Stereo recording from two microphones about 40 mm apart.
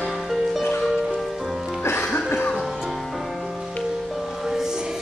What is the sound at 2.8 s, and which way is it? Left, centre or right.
Music, centre.